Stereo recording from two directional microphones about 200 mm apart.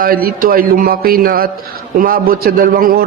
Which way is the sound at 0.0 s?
50° right (ahead or behind).